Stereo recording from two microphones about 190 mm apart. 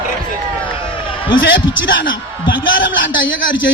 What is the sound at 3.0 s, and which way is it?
Speech, 85° left.